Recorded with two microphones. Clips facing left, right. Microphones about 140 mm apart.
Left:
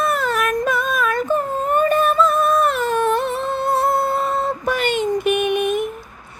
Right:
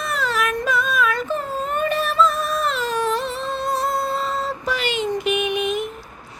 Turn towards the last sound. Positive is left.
turn(degrees=55)  # may be behind; listen again after turning